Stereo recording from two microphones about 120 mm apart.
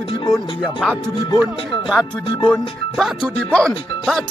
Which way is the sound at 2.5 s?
5° left (ahead or behind).